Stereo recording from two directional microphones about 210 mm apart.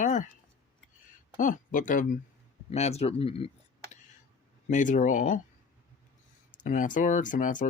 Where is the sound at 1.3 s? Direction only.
40° left (ahead or behind).